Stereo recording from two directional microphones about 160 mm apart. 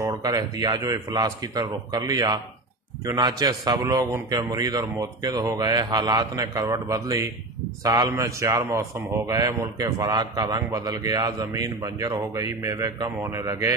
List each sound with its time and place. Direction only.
0.0 s a man's voice: 25° right (ahead or behind)